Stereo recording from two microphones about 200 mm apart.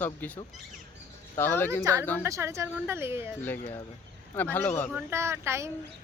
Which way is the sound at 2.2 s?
15° right (ahead or behind).